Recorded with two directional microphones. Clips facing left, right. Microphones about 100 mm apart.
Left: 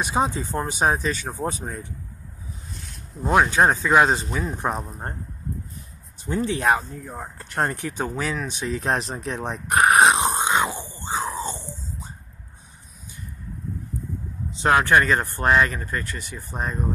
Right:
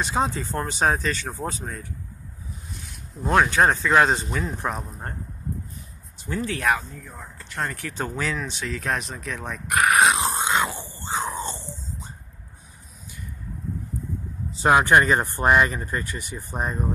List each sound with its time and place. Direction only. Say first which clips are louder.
0.0 s speech: left 1 dB; 15° left (ahead or behind)
2.7 s speech: even; centre (ahead or behind)
4.6 s speech: left 2 dB; 20° left (ahead or behind)
6.2 s speech: left 3 dB; 20° left (ahead or behind); by 7.7 s 45° left (ahead or behind)
7.7 s speech: left 2 dB; 15° left (ahead or behind)
11.1 s screaming: left 1 dB; centre (ahead or behind)
11.4 s a sound: left 2 dB; 15° left (ahead or behind)
14.5 s speech: right 1 dB; 10° right (ahead or behind)